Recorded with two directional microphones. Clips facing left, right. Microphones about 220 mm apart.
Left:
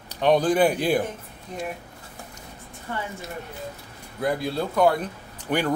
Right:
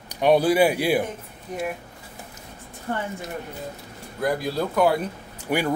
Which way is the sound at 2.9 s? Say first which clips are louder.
Right 4 dB; 45° right (ahead or behind).